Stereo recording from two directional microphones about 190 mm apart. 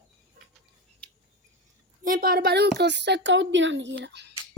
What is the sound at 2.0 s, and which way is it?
A woman's voice, 50° right (ahead or behind).